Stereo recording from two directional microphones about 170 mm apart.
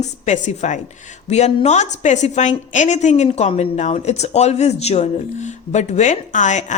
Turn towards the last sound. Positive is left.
turn(degrees=45)  # may be behind; listen again after turning